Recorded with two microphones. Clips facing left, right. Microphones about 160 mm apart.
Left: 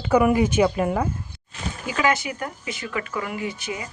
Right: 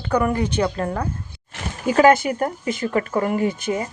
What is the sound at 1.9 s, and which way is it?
A woman's voice, 50° right (ahead or behind).